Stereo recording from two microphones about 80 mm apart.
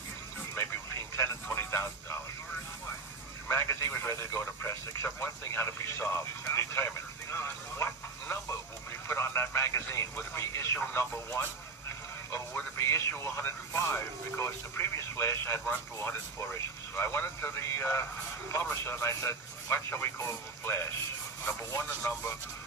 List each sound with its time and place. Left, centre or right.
1.1 s radio: left
3.5 s speech: left
12.5 s speech: left
21.4 s speech: left